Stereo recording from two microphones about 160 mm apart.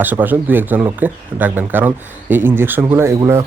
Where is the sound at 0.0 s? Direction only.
10° right (ahead or behind).